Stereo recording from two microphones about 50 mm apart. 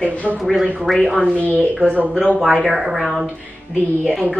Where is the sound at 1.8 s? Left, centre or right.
Right.